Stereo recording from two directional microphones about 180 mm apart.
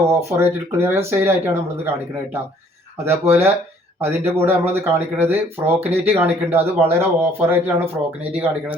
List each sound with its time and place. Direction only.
0.1 s speech: 15° right (ahead or behind)
3.0 s speech: 15° right (ahead or behind)